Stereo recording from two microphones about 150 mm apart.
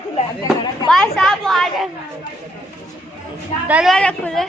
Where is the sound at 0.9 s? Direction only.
5° left (ahead or behind).